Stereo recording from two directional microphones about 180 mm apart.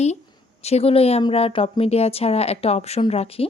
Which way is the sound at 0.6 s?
35° left (ahead or behind).